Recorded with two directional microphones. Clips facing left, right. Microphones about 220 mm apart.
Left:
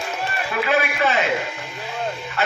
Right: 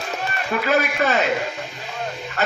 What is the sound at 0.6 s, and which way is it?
Speech, 40° right (ahead or behind).